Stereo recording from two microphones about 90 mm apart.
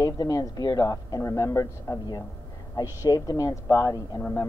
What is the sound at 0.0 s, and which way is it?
Speech, 40° left (ahead or behind).